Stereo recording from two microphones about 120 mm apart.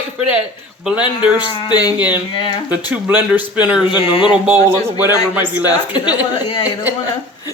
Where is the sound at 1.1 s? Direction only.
40° left (ahead or behind).